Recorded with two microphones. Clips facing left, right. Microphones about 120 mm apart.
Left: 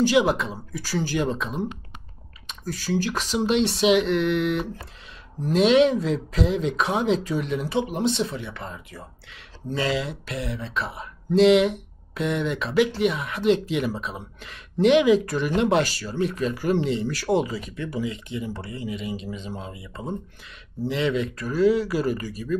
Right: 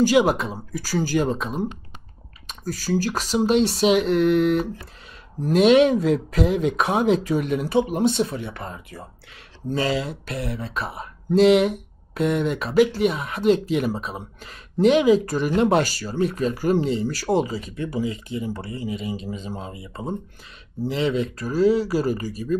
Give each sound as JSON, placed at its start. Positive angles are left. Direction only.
{"t": 0.0, "sound": "speech", "side_deg": -45}